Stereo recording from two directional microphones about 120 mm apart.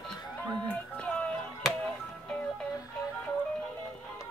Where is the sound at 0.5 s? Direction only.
10° left (ahead or behind).